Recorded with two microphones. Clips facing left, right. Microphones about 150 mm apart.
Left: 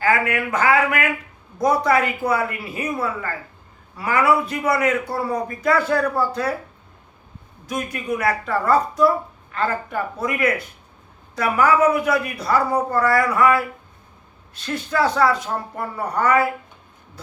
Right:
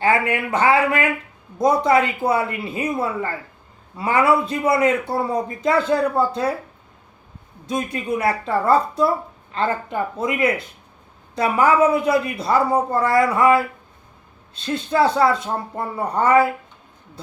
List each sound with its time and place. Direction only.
0.0 s a woman's voice: 25° right (ahead or behind)
7.7 s a woman's voice: 25° right (ahead or behind)